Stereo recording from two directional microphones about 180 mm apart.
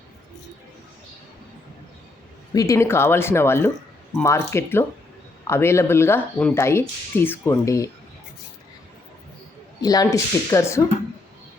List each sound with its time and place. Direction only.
2.5 s speech: 20° left (ahead or behind)
9.8 s speech: 20° left (ahead or behind)